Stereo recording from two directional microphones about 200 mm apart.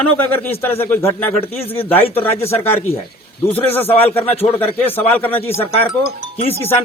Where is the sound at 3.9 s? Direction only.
30° left (ahead or behind).